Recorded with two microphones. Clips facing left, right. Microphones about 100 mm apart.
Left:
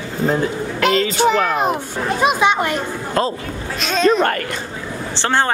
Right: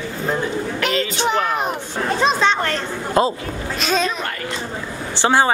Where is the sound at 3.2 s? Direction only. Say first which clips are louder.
Right 2 dB; 15° right (ahead or behind).